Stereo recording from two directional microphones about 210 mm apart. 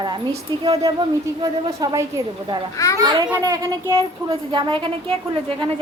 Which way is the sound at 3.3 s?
15° right (ahead or behind).